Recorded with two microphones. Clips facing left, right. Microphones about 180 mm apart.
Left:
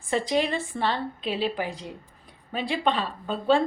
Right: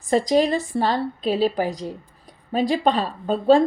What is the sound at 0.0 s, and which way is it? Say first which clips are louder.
A woman's voice: right 7 dB; 40° right (ahead or behind).